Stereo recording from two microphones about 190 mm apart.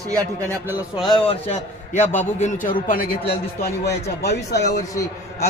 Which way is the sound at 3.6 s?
55° left (ahead or behind).